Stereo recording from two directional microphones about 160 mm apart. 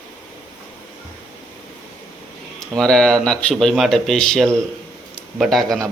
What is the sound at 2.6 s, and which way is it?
Speech, 5° left (ahead or behind).